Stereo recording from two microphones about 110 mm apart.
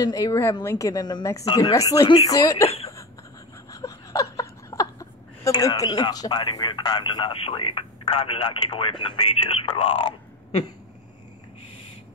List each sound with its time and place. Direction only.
0.0 s a woman's voice: 30° left (ahead or behind); by 1.7 s 45° left (ahead or behind)
1.7 s a woman's voice: 30° left (ahead or behind)
3.7 s a sound: 30° left (ahead or behind)
6.4 s speech: 50° left (ahead or behind)